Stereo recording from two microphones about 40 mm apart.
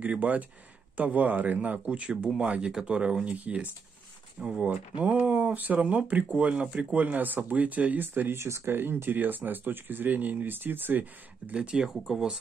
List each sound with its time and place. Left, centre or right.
0.2 s speech: right
3.3 s speech: right
4.4 s speech: right
6.2 s speech: right
11.5 s speech: right
11.8 s speech: centre